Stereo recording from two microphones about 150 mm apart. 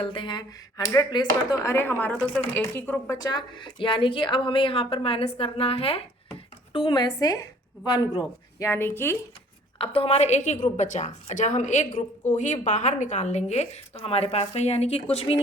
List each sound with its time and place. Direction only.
0.0 s a woman's voice: 35° left (ahead or behind)
1.6 s speech: 15° left (ahead or behind)
3.2 s a woman's voice: 25° left (ahead or behind)
8.5 s speech: 15° left (ahead or behind)
9.7 s a woman's voice: 40° left (ahead or behind)